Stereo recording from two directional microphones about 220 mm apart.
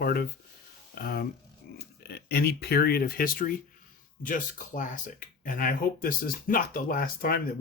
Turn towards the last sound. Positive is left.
turn(degrees=40)  # may be behind; listen again after turning